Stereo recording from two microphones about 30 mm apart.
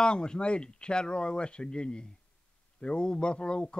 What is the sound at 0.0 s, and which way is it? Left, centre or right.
A man's voice, left.